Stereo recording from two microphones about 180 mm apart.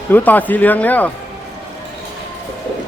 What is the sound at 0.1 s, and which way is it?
Speech, 10° left (ahead or behind).